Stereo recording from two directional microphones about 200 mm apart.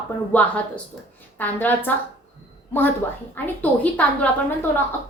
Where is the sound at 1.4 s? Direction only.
10° left (ahead or behind).